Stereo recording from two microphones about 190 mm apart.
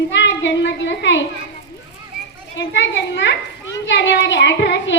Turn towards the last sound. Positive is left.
turn(degrees=65)  # may be behind; listen again after turning